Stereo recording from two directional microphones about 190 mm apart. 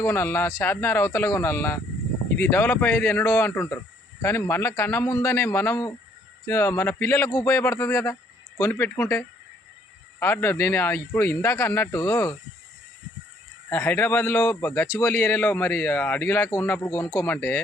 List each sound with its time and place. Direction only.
0.0 s a man's voice: 15° left (ahead or behind)
13.7 s a man's voice: 10° left (ahead or behind)